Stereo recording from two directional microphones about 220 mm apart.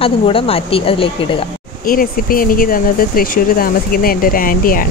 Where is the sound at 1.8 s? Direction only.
40° left (ahead or behind).